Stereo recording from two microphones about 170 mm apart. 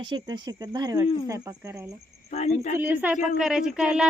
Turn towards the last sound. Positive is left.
turn(degrees=-5)  # may be behind; listen again after turning